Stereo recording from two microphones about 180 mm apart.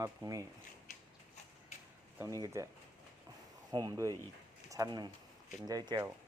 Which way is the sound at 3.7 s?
20° right (ahead or behind).